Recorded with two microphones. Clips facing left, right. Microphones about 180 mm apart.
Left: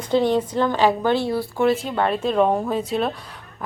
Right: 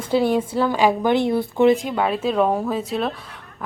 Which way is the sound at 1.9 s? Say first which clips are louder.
Even; 5° right (ahead or behind).